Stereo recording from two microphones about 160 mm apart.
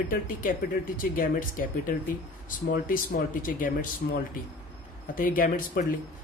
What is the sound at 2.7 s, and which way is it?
Speech, 60° left (ahead or behind).